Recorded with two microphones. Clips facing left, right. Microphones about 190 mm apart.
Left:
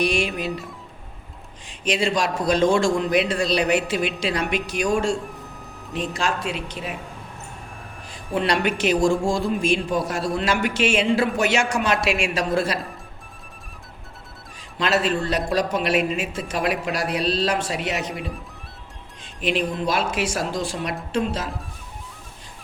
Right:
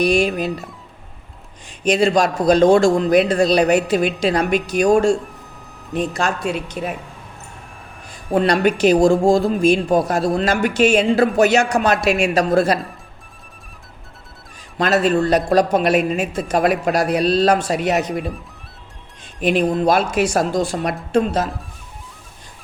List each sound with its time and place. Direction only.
0.0 s a woman's voice: 40° right (ahead or behind)
1.8 s a woman's voice: 40° right (ahead or behind)
8.4 s a woman's voice: 40° right (ahead or behind)
14.8 s a man's voice: 45° right (ahead or behind)
18.1 s speech: centre (ahead or behind)
19.4 s a man's voice: 45° right (ahead or behind)